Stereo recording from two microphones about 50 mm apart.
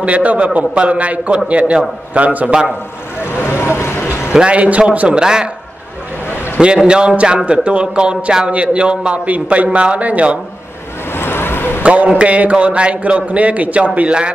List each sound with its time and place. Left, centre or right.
0.0 s a man's voice: right
3.3 s vehicle: left
4.3 s a man's voice: right
6.9 s a man's voice: centre
11.1 s waves: left
11.8 s a man's voice: right